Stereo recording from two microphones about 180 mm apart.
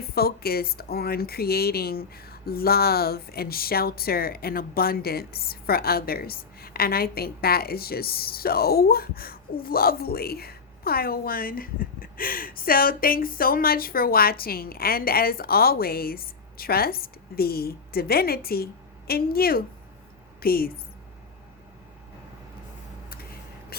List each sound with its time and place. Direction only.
0.0 s a woman's voice: 60° left (ahead or behind)